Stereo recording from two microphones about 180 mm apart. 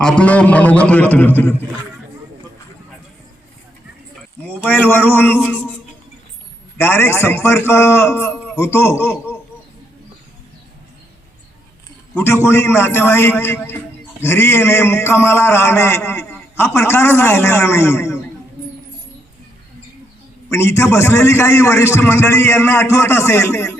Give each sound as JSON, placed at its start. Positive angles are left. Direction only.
{"t": 0.0, "sound": "a man's voice", "side_deg": 5}
{"t": 4.4, "sound": "speech", "side_deg": 10}
{"t": 6.7, "sound": "a man's voice", "side_deg": 15}
{"t": 12.1, "sound": "a man's voice", "side_deg": 15}
{"t": 20.5, "sound": "a man's voice", "side_deg": 15}